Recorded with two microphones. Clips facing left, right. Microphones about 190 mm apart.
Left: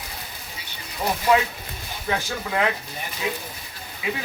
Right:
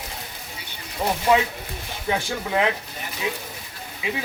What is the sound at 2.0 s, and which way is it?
Speech, 20° right (ahead or behind).